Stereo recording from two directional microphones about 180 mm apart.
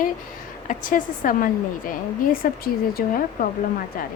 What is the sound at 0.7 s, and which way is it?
A woman's voice, 50° left (ahead or behind).